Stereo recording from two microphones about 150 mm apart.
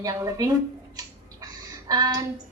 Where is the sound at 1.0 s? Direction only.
25° right (ahead or behind).